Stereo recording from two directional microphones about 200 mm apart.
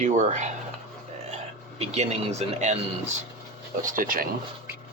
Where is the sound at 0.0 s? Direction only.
35° right (ahead or behind).